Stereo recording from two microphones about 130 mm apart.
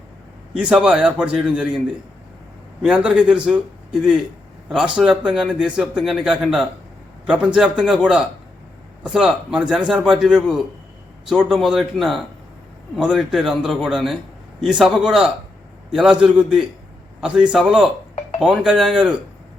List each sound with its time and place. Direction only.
0.5 s a man's voice: 5° right (ahead or behind)
2.8 s a man's voice: 5° right (ahead or behind)